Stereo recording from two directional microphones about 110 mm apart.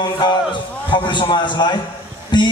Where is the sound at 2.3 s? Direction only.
45° left (ahead or behind).